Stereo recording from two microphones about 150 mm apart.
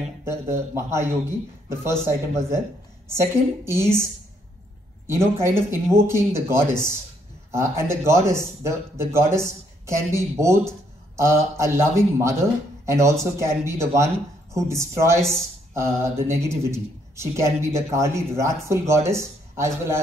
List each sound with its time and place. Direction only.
0.2 s speech: 15° right (ahead or behind)
5.0 s a man's voice: 15° right (ahead or behind)
15.7 s a sound: 20° right (ahead or behind)
16.3 s a man's voice: 20° right (ahead or behind)